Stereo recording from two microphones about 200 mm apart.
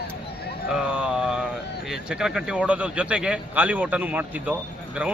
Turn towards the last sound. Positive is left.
turn(degrees=-10)  # may be behind; listen again after turning